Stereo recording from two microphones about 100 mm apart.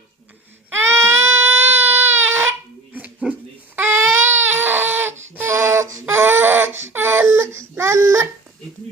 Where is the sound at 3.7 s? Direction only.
25° right (ahead or behind).